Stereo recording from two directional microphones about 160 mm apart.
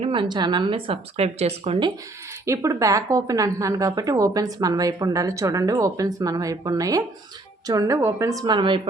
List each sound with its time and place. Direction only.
0.0 s a woman's voice: 30° right (ahead or behind)
2.5 s a woman's voice: 20° right (ahead or behind)